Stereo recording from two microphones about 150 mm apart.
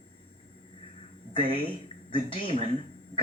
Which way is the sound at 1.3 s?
35° left (ahead or behind).